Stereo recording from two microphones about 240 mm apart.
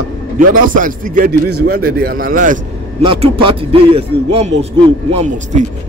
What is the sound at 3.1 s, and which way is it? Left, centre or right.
Speech, right.